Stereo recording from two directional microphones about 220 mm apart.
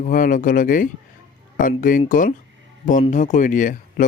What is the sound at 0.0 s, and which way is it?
Speech, 35° left (ahead or behind).